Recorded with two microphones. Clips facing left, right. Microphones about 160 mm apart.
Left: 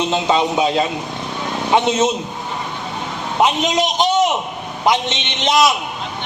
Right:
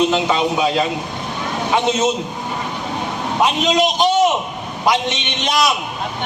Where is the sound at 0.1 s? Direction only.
25° left (ahead or behind).